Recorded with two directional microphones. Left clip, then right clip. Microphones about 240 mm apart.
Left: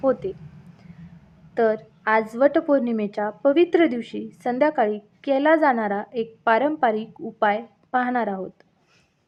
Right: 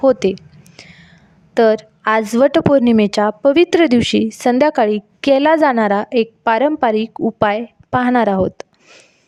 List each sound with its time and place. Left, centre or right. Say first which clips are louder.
0.0 s a woman's voice: right 9 dB; right
0.8 s whispering: right 17 dB; right
1.5 s a woman's voice: right 8 dB; right